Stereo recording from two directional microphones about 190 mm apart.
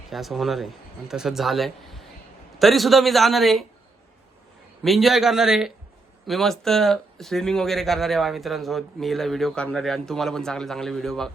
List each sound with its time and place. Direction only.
0.1 s speech: centre (ahead or behind)
4.8 s speech: centre (ahead or behind)